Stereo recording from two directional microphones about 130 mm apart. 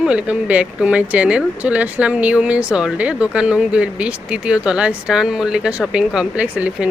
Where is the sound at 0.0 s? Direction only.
10° right (ahead or behind).